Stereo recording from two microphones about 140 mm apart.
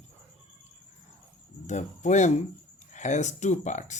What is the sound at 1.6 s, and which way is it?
Speech, 60° left (ahead or behind).